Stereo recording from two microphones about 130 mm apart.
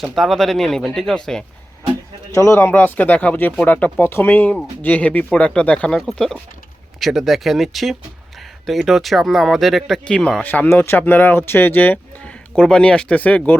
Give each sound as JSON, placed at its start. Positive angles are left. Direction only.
{"t": 0.0, "sound": "speech", "side_deg": 0}
{"t": 2.3, "sound": "speech", "side_deg": 20}